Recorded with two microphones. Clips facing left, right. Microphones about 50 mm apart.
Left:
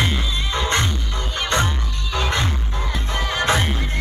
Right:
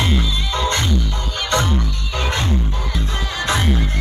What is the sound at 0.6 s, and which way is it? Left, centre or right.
Music, left.